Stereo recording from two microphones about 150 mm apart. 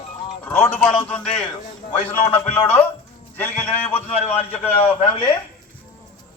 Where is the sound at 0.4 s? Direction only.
15° left (ahead or behind).